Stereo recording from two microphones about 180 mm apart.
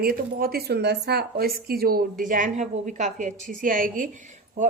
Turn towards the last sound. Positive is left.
turn(degrees=-45)  # may be behind; listen again after turning